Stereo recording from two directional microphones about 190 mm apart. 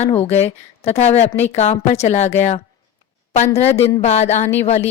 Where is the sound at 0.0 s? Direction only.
35° left (ahead or behind).